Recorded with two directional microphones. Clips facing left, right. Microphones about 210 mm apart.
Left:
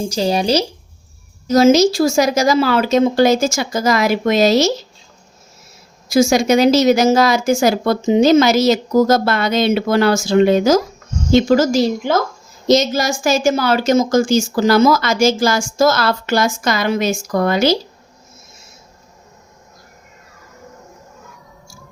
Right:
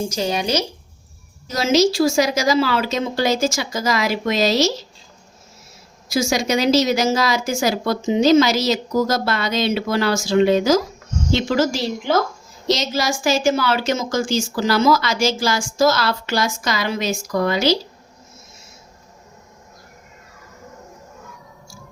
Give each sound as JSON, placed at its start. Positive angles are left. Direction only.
{"t": 0.1, "sound": "speech", "side_deg": 30}
{"t": 1.5, "sound": "a woman's voice", "side_deg": 45}
{"t": 6.1, "sound": "a woman's voice", "side_deg": 50}